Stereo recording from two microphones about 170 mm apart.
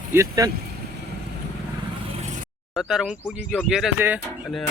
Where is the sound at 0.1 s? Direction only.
20° right (ahead or behind).